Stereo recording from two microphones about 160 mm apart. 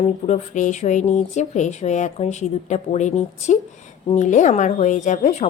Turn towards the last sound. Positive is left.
turn(degrees=50)  # may be behind; listen again after turning